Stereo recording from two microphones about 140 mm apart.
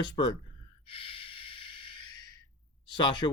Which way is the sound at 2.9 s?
30° left (ahead or behind).